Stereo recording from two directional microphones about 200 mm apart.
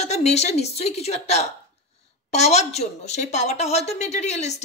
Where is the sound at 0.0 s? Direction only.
35° left (ahead or behind).